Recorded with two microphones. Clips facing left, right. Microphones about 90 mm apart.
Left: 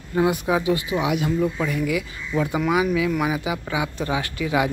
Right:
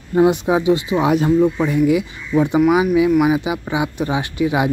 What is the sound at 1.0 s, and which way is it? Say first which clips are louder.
Speech: right 9 dB; 35° right (ahead or behind).